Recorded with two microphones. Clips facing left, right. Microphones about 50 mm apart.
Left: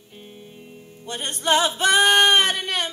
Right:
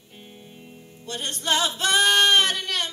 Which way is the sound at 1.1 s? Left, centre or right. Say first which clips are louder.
Left 4 dB; left.